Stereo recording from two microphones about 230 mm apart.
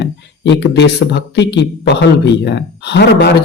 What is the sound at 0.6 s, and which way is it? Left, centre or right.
Speech, left.